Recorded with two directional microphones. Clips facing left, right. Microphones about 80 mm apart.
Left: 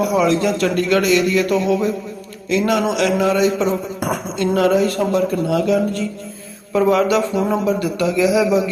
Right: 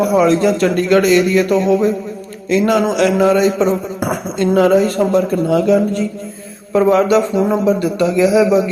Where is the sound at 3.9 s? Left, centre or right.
Right.